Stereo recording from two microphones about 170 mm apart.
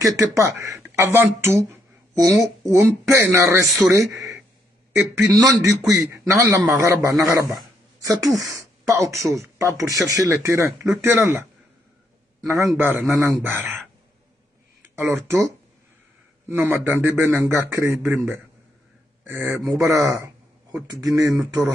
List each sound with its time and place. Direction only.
0.0 s speech: 20° right (ahead or behind)
3.6 s a man's voice: centre (ahead or behind)
5.3 s speech: 20° right (ahead or behind)
12.4 s speech: 15° right (ahead or behind)
15.0 s speech: 15° right (ahead or behind)
16.4 s speech: 10° right (ahead or behind)
19.2 s speech: 15° right (ahead or behind)
21.2 s a man's voice: centre (ahead or behind)
21.5 s speech: 20° right (ahead or behind)